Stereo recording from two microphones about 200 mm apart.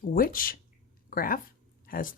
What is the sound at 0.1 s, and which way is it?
A woman's voice, 45° left (ahead or behind).